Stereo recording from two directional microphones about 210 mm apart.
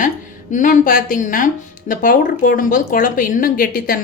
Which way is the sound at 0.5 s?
40° left (ahead or behind).